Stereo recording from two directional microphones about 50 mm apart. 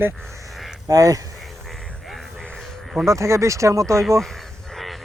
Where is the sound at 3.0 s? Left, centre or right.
Right.